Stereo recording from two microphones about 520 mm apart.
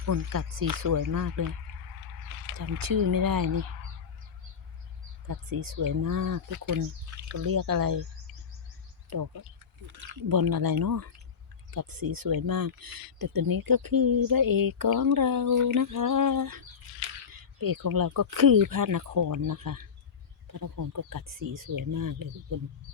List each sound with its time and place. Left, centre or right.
0.0 s speech: right
2.5 s speech: right
5.3 s speech: right
9.0 s speech: right